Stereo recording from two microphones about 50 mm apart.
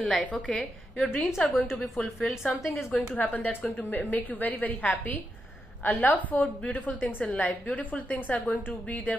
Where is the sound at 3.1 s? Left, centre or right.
Left.